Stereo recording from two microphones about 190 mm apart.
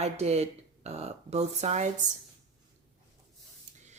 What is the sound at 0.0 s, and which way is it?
Speech, 35° right (ahead or behind).